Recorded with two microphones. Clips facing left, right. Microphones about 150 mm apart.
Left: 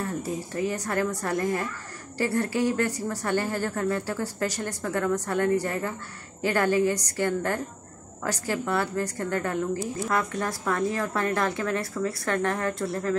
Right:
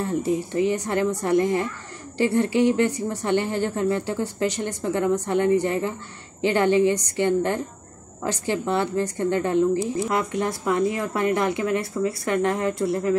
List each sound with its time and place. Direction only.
0.0 s speech: 25° right (ahead or behind)